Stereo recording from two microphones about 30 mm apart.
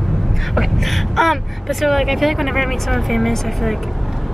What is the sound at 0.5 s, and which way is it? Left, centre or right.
Speech, centre.